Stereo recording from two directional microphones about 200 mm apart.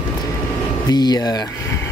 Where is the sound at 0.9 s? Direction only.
20° left (ahead or behind).